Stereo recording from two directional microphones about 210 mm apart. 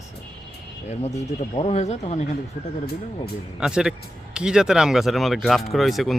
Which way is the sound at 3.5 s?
5° right (ahead or behind).